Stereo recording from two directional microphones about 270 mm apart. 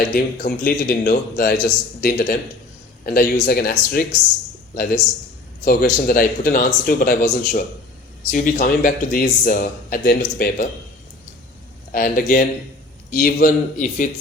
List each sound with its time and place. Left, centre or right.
0.1 s a man's voice: left
5.6 s a man's voice: left
11.9 s a man's voice: left